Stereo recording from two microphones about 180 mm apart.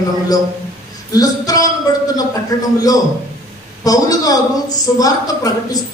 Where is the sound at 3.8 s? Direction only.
20° left (ahead or behind).